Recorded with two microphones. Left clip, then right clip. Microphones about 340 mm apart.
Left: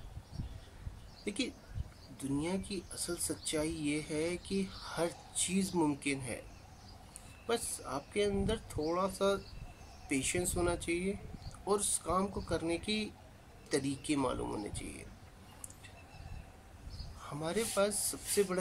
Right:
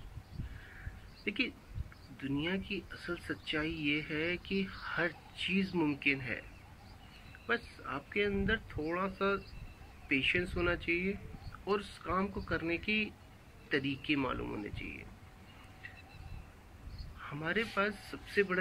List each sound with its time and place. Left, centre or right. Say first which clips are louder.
1.2 s speech: right 3 dB; centre
7.4 s speech: even; centre
17.3 s speech: right 1 dB; centre